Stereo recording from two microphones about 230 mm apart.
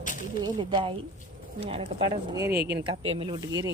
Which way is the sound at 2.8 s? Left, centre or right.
Right.